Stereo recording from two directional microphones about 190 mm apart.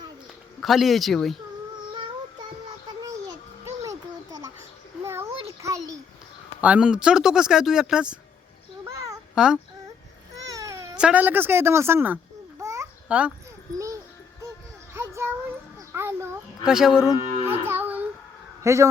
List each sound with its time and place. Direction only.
0.6 s speech: centre (ahead or behind)
3.8 s a sound: 20° right (ahead or behind)
6.6 s speech: 5° right (ahead or behind)
8.8 s babbling: 15° right (ahead or behind)
9.3 s a sound: 5° right (ahead or behind)
10.5 s baby cry: 15° right (ahead or behind)
10.9 s speech: 5° right (ahead or behind)
14.9 s child singing: 10° right (ahead or behind)
15.9 s a sound: 10° right (ahead or behind)
17.1 s livestock: 10° right (ahead or behind)
18.6 s a man's voice: 15° right (ahead or behind)